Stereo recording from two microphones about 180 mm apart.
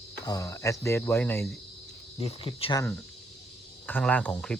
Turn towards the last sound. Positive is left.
turn(degrees=5)  # may be behind; listen again after turning